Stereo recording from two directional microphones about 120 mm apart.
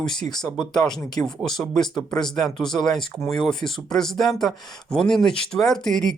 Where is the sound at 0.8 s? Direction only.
5° left (ahead or behind).